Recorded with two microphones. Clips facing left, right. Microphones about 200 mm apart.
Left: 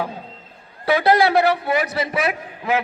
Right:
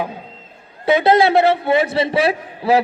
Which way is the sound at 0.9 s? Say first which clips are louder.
Right 3 dB; 20° right (ahead or behind).